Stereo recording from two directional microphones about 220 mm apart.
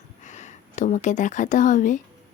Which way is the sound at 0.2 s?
35° left (ahead or behind).